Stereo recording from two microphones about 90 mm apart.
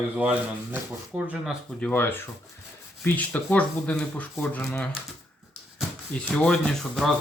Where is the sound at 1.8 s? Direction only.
20° left (ahead or behind).